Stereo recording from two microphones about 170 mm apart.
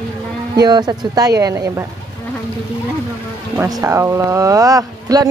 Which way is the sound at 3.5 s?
15° right (ahead or behind).